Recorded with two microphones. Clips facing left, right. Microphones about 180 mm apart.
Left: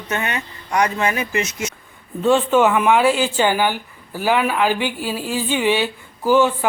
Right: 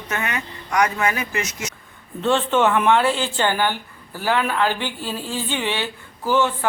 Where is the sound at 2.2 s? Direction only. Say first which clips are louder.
Left 4 dB; 10° left (ahead or behind).